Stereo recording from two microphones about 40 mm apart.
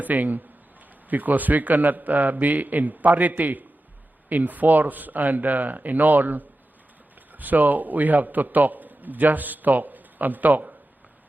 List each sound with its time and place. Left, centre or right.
0.0 s a man's voice: right